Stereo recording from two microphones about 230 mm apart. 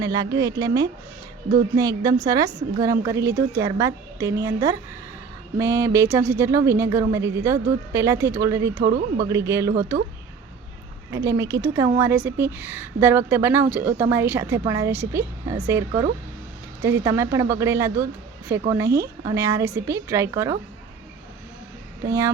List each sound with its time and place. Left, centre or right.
0.0 s a woman's voice: centre
8.8 s speech: right
9.1 s a woman's voice: centre
11.1 s a woman's voice: centre